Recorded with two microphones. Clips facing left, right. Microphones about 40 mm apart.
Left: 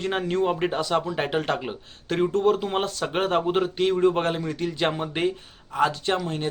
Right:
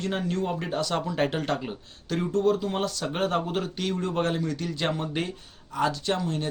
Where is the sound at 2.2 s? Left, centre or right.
Left.